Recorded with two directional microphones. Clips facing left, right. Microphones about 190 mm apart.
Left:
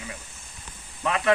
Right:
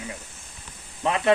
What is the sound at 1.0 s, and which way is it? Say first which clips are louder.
Speech: right 2 dB; 30° right (ahead or behind).